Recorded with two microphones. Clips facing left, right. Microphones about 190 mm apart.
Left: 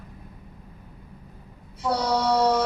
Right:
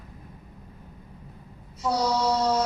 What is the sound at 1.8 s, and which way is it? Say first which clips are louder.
Speech: left 1 dB; 60° left (ahead or behind).